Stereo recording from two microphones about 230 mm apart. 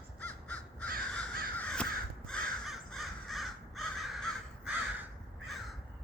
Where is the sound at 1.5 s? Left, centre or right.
Centre.